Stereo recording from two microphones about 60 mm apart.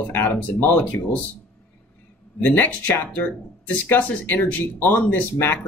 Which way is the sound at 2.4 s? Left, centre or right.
Left.